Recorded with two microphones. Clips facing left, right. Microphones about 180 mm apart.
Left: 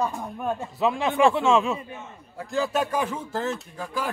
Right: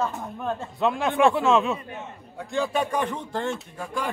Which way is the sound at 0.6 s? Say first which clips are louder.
Even; centre (ahead or behind).